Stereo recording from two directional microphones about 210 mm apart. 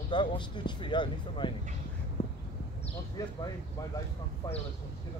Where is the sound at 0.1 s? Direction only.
20° left (ahead or behind).